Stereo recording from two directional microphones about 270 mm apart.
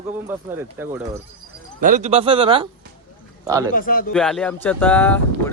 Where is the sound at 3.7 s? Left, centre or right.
Left.